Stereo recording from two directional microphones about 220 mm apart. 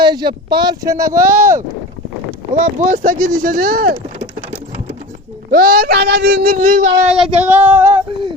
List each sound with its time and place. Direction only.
0.0 s speech: 20° right (ahead or behind)
2.6 s speech: 35° right (ahead or behind)
5.5 s speech: 40° right (ahead or behind)
7.3 s speech: 10° right (ahead or behind)